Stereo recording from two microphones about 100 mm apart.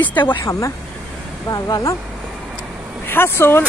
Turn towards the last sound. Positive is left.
turn(degrees=25)  # may be behind; listen again after turning